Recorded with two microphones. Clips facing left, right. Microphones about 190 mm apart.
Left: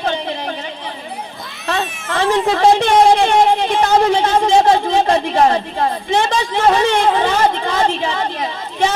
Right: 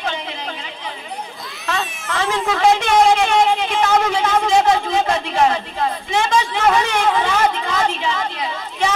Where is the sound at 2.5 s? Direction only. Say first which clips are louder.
Left 2 dB; 35° left (ahead or behind).